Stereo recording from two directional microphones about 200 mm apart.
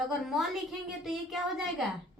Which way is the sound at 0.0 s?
Centre (ahead or behind).